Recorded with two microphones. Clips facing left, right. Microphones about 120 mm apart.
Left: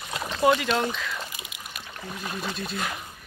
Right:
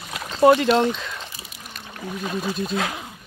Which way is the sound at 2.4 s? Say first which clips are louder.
Right 7 dB; 20° right (ahead or behind).